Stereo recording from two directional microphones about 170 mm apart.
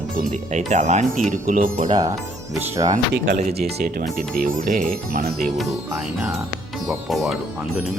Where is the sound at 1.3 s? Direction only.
50° right (ahead or behind).